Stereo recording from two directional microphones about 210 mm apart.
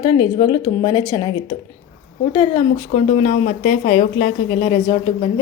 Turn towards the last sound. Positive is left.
turn(degrees=25)  # may be behind; listen again after turning